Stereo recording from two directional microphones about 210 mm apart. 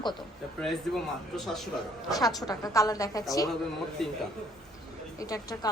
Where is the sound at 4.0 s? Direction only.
Centre (ahead or behind).